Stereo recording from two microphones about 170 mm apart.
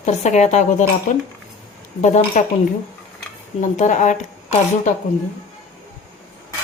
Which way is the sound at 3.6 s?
45° left (ahead or behind).